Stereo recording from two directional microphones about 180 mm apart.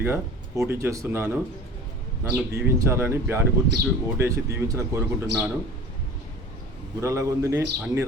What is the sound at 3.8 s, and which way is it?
Speech, 60° right (ahead or behind).